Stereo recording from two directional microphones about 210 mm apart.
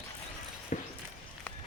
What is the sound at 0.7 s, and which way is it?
Walk, 35° left (ahead or behind).